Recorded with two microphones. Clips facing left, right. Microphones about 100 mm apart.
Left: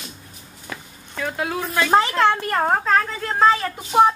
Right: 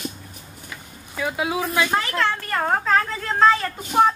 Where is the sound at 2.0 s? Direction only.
20° left (ahead or behind).